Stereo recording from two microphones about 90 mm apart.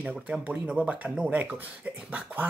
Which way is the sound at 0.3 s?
5° right (ahead or behind).